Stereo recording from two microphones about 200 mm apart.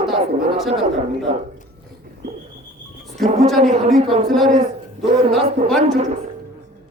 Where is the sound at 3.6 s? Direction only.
35° right (ahead or behind).